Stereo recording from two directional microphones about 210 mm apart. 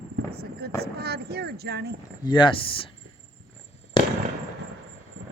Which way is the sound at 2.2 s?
25° left (ahead or behind).